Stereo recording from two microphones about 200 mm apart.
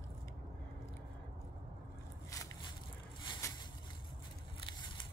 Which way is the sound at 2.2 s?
15° left (ahead or behind).